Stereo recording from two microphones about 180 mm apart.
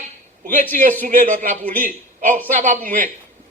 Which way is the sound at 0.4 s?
50° right (ahead or behind).